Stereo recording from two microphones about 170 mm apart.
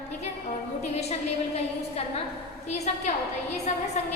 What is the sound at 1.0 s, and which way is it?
A woman's voice, 40° left (ahead or behind).